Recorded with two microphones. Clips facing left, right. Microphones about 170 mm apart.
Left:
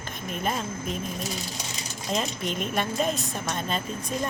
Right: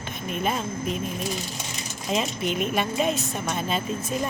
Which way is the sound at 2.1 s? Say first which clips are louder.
Right 3 dB; 5° right (ahead or behind).